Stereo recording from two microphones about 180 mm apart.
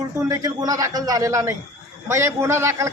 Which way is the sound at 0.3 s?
20° right (ahead or behind).